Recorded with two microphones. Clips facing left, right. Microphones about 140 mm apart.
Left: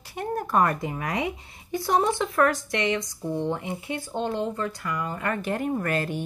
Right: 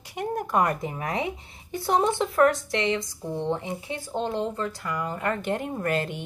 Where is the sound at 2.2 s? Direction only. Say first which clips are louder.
Right 2 dB; 30° right (ahead or behind).